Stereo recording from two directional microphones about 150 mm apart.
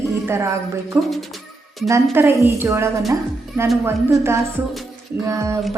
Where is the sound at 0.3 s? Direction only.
20° right (ahead or behind).